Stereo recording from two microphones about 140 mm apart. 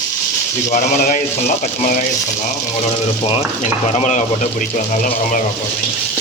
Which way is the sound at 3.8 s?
55° left (ahead or behind).